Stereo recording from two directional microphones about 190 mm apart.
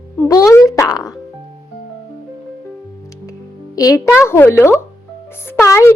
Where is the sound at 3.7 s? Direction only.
20° left (ahead or behind).